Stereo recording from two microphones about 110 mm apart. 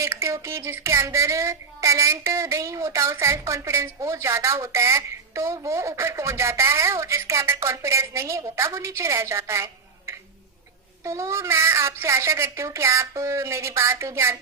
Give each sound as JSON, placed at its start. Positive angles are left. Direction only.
{"t": 0.0, "sound": "a woman's voice", "side_deg": -25}
{"t": 11.0, "sound": "a woman's voice", "side_deg": -25}